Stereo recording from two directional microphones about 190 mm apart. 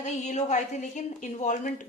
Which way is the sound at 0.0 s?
40° left (ahead or behind).